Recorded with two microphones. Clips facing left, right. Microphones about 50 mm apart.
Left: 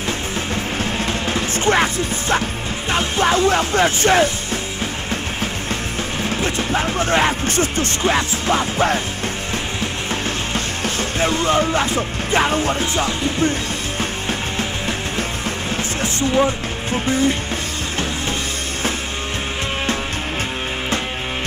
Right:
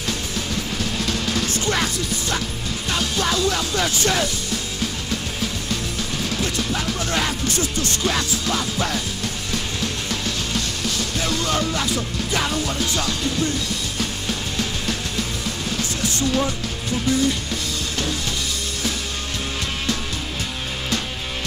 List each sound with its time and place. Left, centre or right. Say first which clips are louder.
0.7 s music: left 2 dB; left
2.9 s speech: left 5 dB; left
5.1 s music: left 3 dB; left
6.2 s speech: left 3 dB; left
9.5 s music: left 2 dB; left